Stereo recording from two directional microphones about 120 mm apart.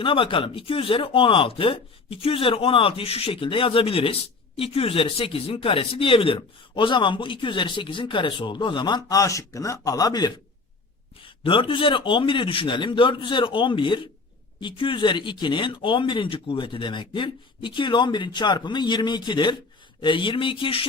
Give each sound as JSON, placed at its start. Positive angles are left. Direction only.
{"t": 0.0, "sound": "speech", "side_deg": 45}
{"t": 11.4, "sound": "speech", "side_deg": 45}